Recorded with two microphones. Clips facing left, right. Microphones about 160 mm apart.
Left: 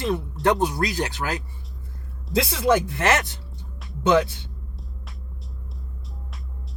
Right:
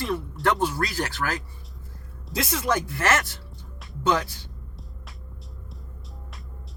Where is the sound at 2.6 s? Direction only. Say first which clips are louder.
Left 5 dB; 20° left (ahead or behind).